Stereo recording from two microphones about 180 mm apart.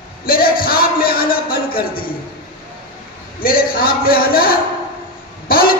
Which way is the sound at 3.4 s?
55° left (ahead or behind).